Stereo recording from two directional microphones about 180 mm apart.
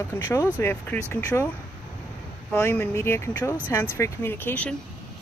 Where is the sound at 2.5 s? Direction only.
15° left (ahead or behind).